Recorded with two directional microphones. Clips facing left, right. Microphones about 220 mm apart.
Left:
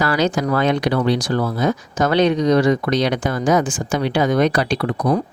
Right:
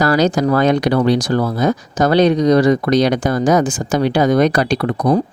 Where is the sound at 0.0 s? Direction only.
40° right (ahead or behind).